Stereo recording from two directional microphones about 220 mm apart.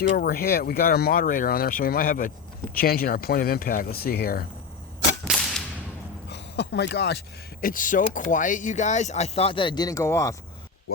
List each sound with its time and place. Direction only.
0.0 s speech: 45° left (ahead or behind)
5.3 s whip: centre (ahead or behind)
6.3 s speech: 50° left (ahead or behind)
7.6 s speech: 40° left (ahead or behind); by 10.3 s 15° left (ahead or behind)